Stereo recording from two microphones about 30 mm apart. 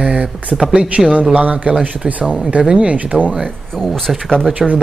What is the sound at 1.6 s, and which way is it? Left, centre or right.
Speech, right.